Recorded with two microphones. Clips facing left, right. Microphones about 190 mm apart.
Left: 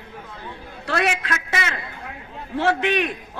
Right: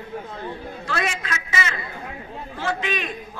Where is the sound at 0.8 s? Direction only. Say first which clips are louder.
Left 5 dB; 65° left (ahead or behind).